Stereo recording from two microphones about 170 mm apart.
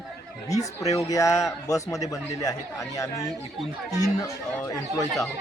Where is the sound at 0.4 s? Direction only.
20° left (ahead or behind).